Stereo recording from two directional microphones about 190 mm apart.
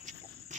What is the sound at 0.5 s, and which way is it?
Insect, 40° right (ahead or behind).